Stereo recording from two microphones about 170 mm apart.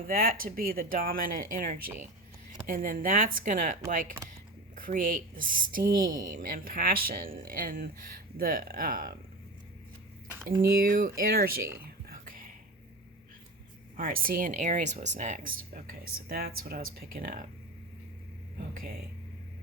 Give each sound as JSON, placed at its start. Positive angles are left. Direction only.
{"t": 0.1, "sound": "a woman's voice", "side_deg": -55}
{"t": 10.8, "sound": "speech", "side_deg": -55}
{"t": 11.9, "sound": "whispering", "side_deg": -60}
{"t": 13.9, "sound": "speech", "side_deg": -55}
{"t": 18.7, "sound": "speech", "side_deg": -60}